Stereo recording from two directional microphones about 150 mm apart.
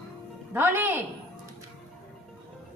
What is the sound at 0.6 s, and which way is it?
Speech, 15° right (ahead or behind).